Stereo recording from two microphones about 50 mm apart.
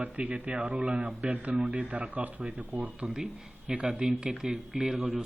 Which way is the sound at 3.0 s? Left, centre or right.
Centre.